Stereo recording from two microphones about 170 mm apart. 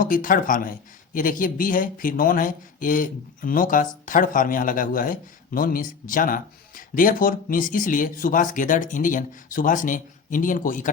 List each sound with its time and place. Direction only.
0.0 s speech: 50° left (ahead or behind)